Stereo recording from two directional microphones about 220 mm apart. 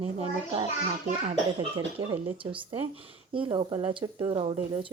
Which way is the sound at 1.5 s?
25° right (ahead or behind).